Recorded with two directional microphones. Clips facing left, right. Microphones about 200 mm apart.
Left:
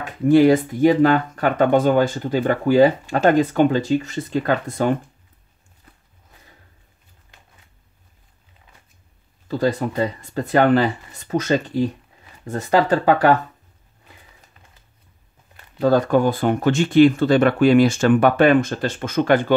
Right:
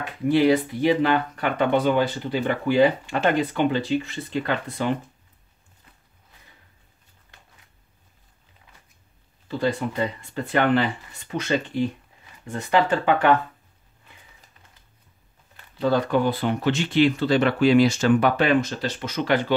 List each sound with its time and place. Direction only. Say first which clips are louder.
0.0 s speech: left 6 dB; 45° left (ahead or behind)
9.5 s speech: left 4 dB; 40° left (ahead or behind)
15.8 s speech: left 5 dB; 45° left (ahead or behind)